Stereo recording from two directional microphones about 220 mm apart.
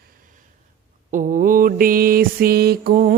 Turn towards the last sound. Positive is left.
turn(degrees=-40)  # may be behind; listen again after turning